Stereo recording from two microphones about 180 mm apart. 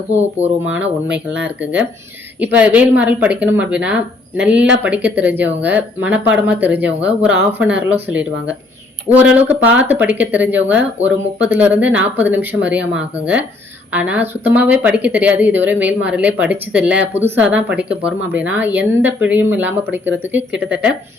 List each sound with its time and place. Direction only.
0.4 s speech: 10° right (ahead or behind)